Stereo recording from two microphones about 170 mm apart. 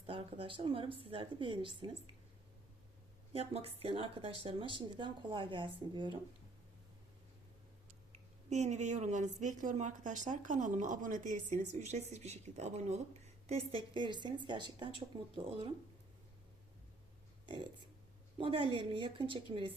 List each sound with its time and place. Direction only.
0.0 s speech: 30° right (ahead or behind)
3.3 s speech: 35° right (ahead or behind)
8.1 s a woman's voice: 45° right (ahead or behind)
18.3 s speech: 30° right (ahead or behind)